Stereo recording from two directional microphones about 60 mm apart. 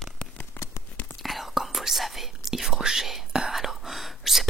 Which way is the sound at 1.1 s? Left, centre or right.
Centre.